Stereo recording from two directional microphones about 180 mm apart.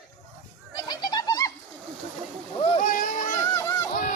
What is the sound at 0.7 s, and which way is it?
Bird, 25° left (ahead or behind).